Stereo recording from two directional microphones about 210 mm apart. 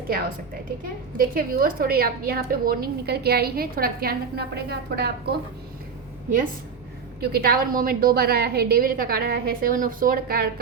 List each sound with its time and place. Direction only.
1.2 s a woman's voice: 40° right (ahead or behind)
7.2 s a woman's voice: 45° right (ahead or behind)